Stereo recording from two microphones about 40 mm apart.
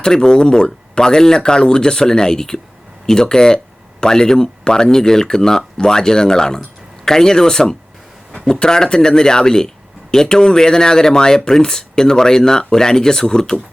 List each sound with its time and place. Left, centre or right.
0.0 s speech: centre